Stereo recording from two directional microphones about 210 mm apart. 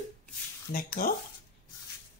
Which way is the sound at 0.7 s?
45° left (ahead or behind).